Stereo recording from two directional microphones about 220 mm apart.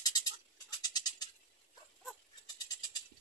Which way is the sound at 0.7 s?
20° left (ahead or behind).